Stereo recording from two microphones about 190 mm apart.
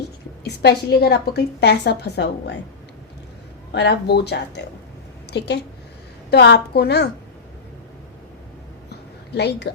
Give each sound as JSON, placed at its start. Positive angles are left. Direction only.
{"t": 0.4, "sound": "a woman's voice", "side_deg": 60}
{"t": 3.7, "sound": "a woman's voice", "side_deg": 60}
{"t": 6.3, "sound": "a woman's voice", "side_deg": 60}
{"t": 8.9, "sound": "a sound", "side_deg": 60}